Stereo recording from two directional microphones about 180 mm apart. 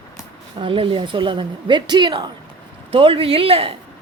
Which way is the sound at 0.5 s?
30° right (ahead or behind).